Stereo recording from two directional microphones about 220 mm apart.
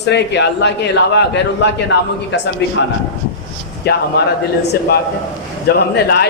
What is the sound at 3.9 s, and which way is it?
Speech, 45° left (ahead or behind).